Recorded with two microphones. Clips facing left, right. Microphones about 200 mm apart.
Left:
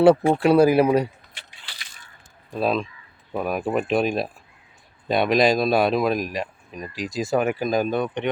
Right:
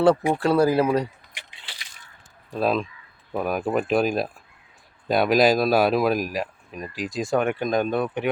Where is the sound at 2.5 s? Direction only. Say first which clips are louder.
Even; centre (ahead or behind).